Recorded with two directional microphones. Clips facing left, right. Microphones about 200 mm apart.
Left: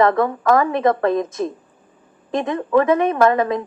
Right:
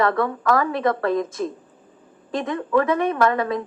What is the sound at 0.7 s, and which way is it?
Speech, 25° left (ahead or behind).